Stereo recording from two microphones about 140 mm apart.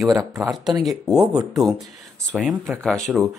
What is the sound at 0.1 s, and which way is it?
Speech, 25° right (ahead or behind).